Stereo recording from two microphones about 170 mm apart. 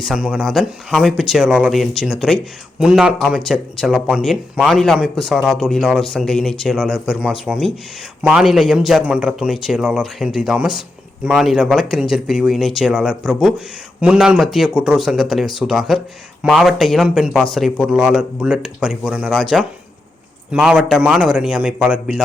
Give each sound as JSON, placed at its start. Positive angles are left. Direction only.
{"t": 0.0, "sound": "speech", "side_deg": -5}